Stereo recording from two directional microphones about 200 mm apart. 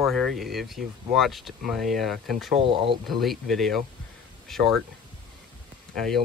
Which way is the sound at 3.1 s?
Centre (ahead or behind).